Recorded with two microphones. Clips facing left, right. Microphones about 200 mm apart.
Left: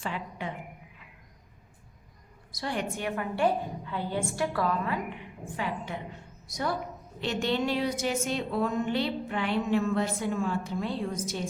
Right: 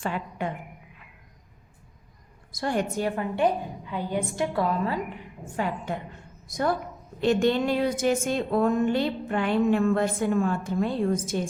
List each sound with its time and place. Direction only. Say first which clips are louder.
0.0 s a woman's voice: right 5 dB; 50° right (ahead or behind)
2.5 s a woman's voice: right 5 dB; 50° right (ahead or behind)
3.3 s a woman's voice: even; 15° right (ahead or behind)
5.5 s a woman's voice: right 5 dB; 45° right (ahead or behind)